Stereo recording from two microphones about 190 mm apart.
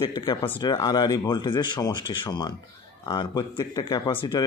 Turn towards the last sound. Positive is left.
turn(degrees=25)  # may be behind; listen again after turning